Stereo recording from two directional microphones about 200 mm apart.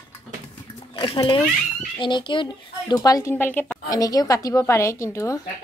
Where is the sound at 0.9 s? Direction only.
25° left (ahead or behind).